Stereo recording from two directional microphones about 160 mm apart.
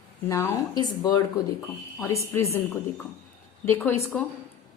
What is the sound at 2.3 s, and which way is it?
Speech, 20° left (ahead or behind).